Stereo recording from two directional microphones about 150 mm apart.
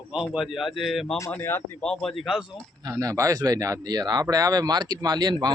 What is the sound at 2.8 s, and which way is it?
Speech, 25° right (ahead or behind).